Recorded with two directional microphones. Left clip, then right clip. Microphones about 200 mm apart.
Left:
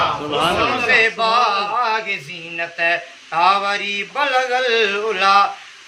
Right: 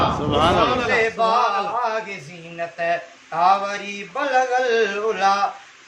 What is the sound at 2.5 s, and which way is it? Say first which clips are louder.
Speech: left 4 dB; 5° right (ahead or behind).